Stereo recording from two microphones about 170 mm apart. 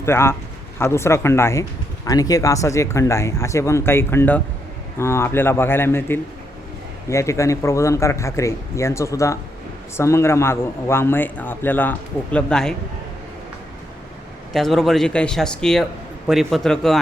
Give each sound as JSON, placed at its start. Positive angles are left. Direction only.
{"t": 0.0, "sound": "a man's voice", "side_deg": 15}
{"t": 14.5, "sound": "a man's voice", "side_deg": 0}